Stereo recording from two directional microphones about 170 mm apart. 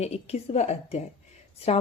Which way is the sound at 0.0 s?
40° left (ahead or behind).